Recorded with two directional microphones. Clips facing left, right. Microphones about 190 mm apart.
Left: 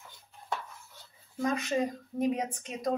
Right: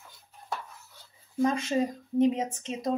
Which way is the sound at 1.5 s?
25° right (ahead or behind).